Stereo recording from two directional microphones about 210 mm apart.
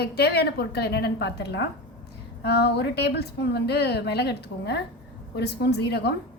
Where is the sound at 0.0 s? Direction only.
50° left (ahead or behind).